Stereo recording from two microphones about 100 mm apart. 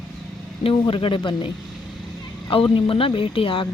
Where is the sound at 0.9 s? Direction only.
60° left (ahead or behind).